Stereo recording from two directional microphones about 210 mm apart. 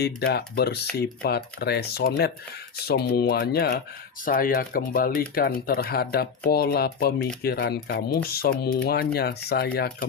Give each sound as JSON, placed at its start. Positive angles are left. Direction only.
{"t": 0.0, "sound": "speech", "side_deg": 50}